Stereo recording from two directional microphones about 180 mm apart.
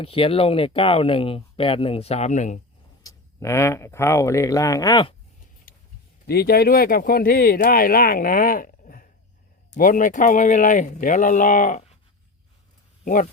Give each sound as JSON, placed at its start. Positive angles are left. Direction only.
{"t": 0.0, "sound": "speech", "side_deg": 30}
{"t": 3.0, "sound": "speech", "side_deg": 15}
{"t": 6.2, "sound": "speech", "side_deg": 60}